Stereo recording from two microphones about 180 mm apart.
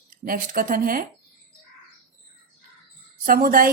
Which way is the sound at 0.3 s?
50° right (ahead or behind).